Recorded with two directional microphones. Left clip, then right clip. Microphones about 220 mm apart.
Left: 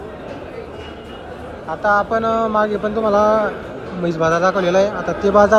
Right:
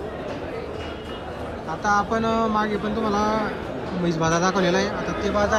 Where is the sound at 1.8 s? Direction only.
15° right (ahead or behind).